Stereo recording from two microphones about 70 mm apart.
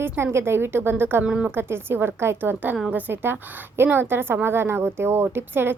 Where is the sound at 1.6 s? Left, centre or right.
Right.